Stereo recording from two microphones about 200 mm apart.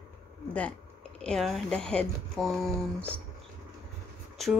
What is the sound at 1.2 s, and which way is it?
Speech, centre (ahead or behind).